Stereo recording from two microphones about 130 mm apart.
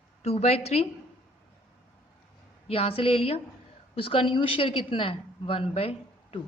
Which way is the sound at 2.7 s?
45° left (ahead or behind).